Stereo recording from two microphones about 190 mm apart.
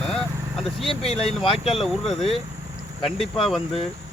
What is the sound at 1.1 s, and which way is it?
Speech, 35° left (ahead or behind).